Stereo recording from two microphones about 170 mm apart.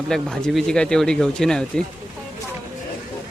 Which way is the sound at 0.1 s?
5° left (ahead or behind).